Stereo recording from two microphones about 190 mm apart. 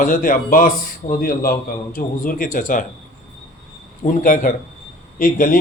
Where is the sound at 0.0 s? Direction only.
45° left (ahead or behind).